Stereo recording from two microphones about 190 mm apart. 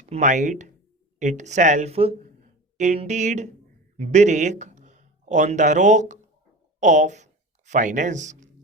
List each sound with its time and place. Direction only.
0.0 s speech: 40° right (ahead or behind)